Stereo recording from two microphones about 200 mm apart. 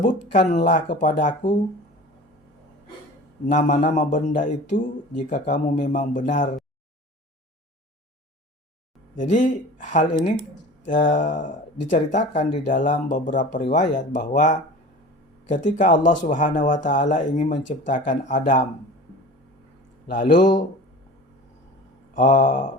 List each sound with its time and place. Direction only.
0.0 s a man's voice: 40° left (ahead or behind)
3.4 s a man's voice: 40° left (ahead or behind)
9.1 s a man's voice: 40° left (ahead or behind)
20.1 s a man's voice: 40° left (ahead or behind)
22.1 s a man's voice: 40° left (ahead or behind)